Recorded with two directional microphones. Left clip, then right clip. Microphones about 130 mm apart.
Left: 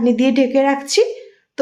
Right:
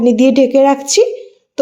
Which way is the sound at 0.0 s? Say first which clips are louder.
Right 6 dB; 30° right (ahead or behind).